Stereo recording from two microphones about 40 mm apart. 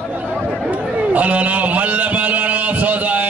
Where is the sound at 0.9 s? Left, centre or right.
Right.